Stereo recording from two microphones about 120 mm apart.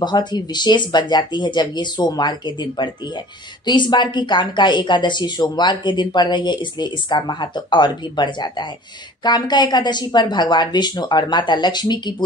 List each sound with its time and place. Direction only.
0.0 s a woman's voice: 40° left (ahead or behind)